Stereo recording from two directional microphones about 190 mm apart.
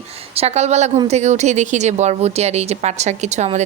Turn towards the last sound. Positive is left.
turn(degrees=-35)  # may be behind; listen again after turning